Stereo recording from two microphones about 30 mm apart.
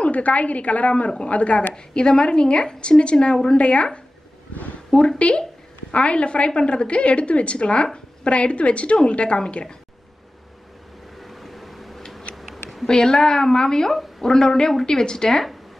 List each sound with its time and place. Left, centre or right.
0.0 s a woman's voice: left
1.7 s a woman's voice: left
4.9 s speech: centre
5.9 s a woman's voice: left
11.1 s a sound: centre
12.8 s a woman's voice: left